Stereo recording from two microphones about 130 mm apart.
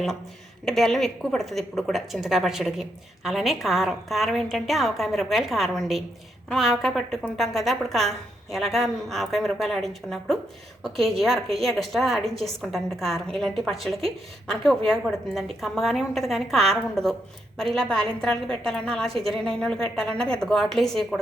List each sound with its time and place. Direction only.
0.6 s a woman's voice: 5° left (ahead or behind)